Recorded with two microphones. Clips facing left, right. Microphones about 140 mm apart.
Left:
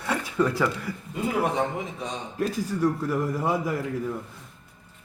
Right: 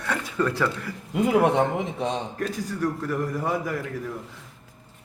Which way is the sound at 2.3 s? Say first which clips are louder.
Left 2 dB; 5° left (ahead or behind).